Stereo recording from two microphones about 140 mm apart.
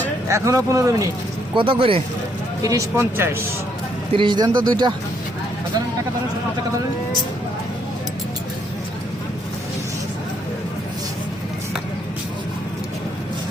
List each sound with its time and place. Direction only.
0.3 s speech: 20° right (ahead or behind)
1.5 s speech: 40° right (ahead or behind)
2.6 s speech: 20° right (ahead or behind)
4.1 s speech: 35° right (ahead or behind)